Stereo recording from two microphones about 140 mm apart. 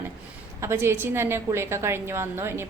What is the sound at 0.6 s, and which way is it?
A woman's voice, 15° right (ahead or behind).